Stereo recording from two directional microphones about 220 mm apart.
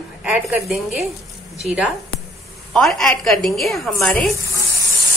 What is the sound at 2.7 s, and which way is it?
A woman's voice, centre (ahead or behind).